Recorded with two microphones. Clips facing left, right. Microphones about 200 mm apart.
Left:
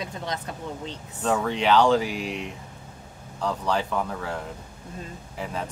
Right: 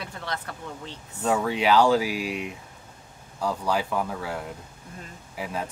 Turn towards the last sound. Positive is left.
turn(degrees=-5)  # may be behind; listen again after turning